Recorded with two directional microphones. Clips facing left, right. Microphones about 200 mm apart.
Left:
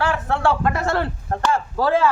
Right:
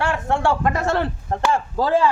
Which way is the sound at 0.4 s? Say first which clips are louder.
Left 1 dB; 15° right (ahead or behind).